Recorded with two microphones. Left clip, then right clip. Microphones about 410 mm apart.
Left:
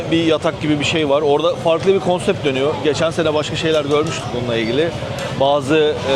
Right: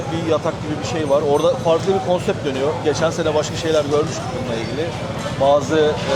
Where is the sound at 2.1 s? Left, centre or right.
Left.